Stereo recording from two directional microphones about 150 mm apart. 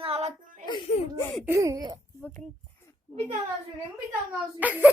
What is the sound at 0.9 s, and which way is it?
Speech, 50° left (ahead or behind).